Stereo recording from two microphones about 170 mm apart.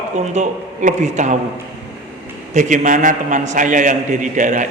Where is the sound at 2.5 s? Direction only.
45° right (ahead or behind).